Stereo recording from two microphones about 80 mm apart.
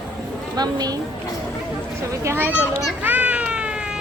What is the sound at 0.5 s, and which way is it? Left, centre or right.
Speech, right.